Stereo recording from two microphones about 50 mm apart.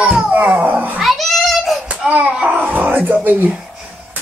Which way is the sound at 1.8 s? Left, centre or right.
Right.